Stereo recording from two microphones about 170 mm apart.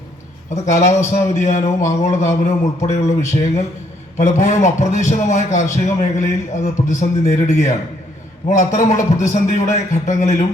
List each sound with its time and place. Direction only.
0.5 s a man's voice: 45° left (ahead or behind)